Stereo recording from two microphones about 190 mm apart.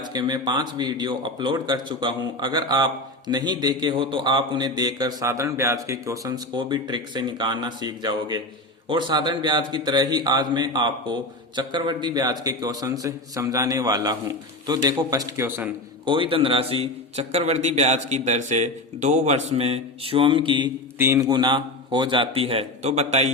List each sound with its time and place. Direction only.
0.0 s a man's voice: 20° right (ahead or behind)
16.0 s a man's voice: 25° right (ahead or behind)
21.0 s a man's voice: 15° right (ahead or behind); by 23.3 s 35° right (ahead or behind)